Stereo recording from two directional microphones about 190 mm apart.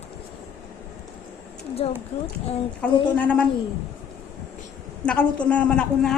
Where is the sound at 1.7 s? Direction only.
30° left (ahead or behind).